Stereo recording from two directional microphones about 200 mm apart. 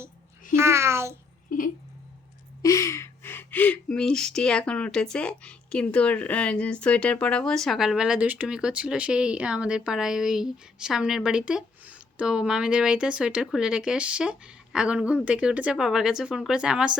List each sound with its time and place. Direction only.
0.5 s speech: 15° right (ahead or behind)
1.5 s speech: 45° left (ahead or behind)
2.6 s speech: 15° left (ahead or behind); by 17.0 s 5° right (ahead or behind)